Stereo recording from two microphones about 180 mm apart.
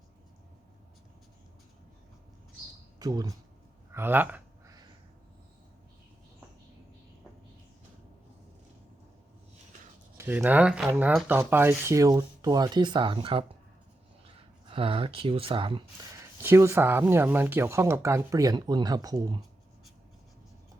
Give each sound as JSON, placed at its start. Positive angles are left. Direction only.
{"t": 3.0, "sound": "speech", "side_deg": -20}
{"t": 3.9, "sound": "a sound", "side_deg": -10}
{"t": 10.2, "sound": "speech", "side_deg": -10}
{"t": 14.7, "sound": "speech", "side_deg": -30}
{"t": 16.4, "sound": "speech", "side_deg": -15}